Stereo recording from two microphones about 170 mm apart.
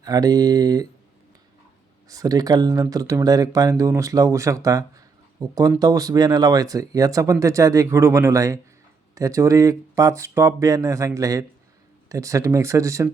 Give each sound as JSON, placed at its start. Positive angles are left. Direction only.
{"t": 0.0, "sound": "speech", "side_deg": -20}
{"t": 2.0, "sound": "speech", "side_deg": -20}